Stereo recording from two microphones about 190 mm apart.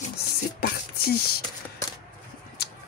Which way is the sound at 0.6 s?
55° left (ahead or behind).